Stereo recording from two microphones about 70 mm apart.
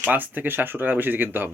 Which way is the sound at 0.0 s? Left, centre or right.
Right.